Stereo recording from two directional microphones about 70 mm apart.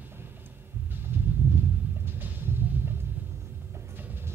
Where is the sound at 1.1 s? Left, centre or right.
Right.